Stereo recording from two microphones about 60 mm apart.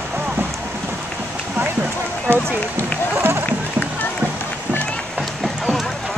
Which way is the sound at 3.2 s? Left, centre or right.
Right.